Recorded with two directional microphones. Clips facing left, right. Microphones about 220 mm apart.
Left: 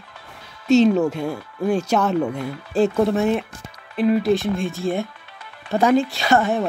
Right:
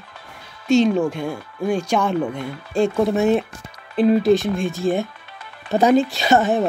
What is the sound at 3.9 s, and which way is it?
Speech, 30° right (ahead or behind).